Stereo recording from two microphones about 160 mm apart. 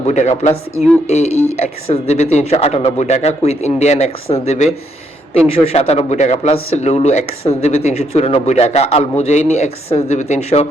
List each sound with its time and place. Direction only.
0.1 s speech: 45° left (ahead or behind)